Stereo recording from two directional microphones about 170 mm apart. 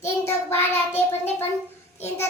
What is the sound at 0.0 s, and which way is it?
Child singing, 15° left (ahead or behind).